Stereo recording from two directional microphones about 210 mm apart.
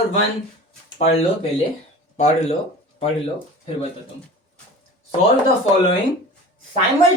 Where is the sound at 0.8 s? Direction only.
25° left (ahead or behind).